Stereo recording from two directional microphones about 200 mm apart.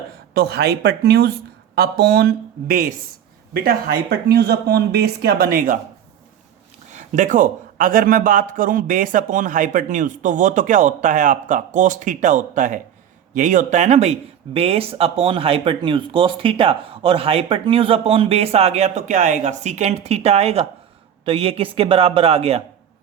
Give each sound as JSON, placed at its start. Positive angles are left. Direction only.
{"t": 0.3, "sound": "a woman's voice", "side_deg": -55}
{"t": 6.9, "sound": "a man's voice", "side_deg": -40}